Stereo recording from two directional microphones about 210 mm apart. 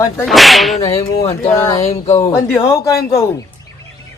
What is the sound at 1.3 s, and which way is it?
Speech, 15° left (ahead or behind).